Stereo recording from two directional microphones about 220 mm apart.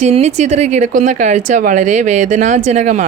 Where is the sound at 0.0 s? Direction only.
30° right (ahead or behind).